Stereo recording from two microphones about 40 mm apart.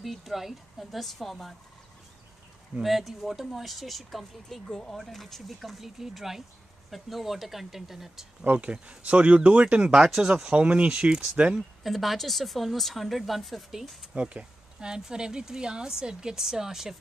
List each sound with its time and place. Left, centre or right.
0.0 s speech: centre
2.8 s speech: centre
8.5 s speech: right
11.8 s speech: centre
14.1 s speech: right; by 16.9 s centre